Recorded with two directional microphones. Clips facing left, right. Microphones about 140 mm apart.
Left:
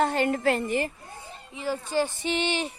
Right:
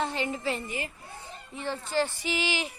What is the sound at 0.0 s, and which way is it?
Speech, 55° left (ahead or behind).